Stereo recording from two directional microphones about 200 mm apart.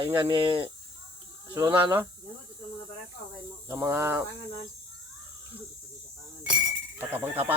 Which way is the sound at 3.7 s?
15° right (ahead or behind).